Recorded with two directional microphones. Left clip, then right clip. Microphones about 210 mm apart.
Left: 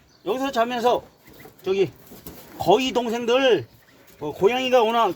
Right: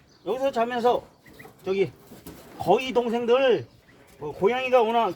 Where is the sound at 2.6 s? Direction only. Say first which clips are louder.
Left 3 dB; 45° left (ahead or behind).